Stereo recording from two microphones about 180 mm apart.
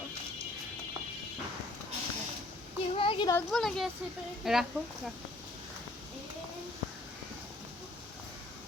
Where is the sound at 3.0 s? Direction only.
30° left (ahead or behind).